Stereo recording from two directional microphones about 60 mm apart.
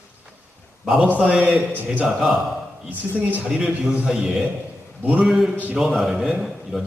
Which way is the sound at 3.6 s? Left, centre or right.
Centre.